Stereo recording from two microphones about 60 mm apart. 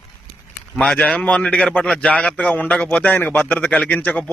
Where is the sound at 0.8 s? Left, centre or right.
Centre.